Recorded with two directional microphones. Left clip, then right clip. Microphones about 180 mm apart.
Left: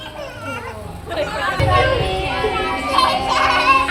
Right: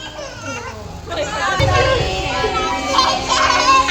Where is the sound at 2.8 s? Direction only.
10° right (ahead or behind).